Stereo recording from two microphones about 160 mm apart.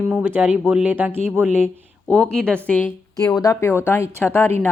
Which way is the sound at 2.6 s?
10° left (ahead or behind).